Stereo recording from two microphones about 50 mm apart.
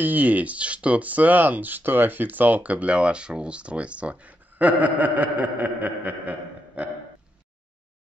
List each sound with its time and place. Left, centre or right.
0.0 s speech: right